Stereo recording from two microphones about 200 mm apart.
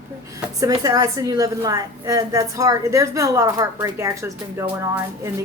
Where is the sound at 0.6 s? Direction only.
20° right (ahead or behind).